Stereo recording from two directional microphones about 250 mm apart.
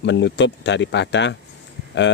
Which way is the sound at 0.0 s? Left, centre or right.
Left.